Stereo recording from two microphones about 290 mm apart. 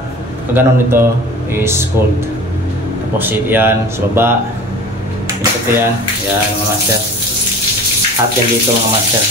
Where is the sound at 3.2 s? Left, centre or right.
Centre.